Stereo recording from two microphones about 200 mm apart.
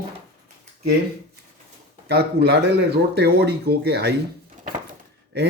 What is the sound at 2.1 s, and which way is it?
Speech, 55° right (ahead or behind).